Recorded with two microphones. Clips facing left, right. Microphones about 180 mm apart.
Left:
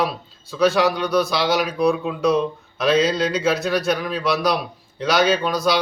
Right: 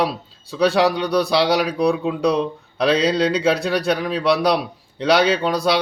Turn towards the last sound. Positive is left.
turn(degrees=-30)  # may be behind; listen again after turning